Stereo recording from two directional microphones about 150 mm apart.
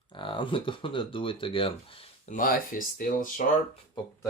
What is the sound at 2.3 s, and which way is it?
Speech, 65° left (ahead or behind).